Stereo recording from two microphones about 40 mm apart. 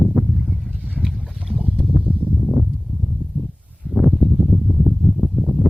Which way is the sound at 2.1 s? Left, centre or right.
Left.